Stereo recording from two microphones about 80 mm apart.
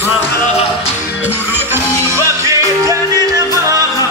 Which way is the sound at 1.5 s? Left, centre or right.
Right.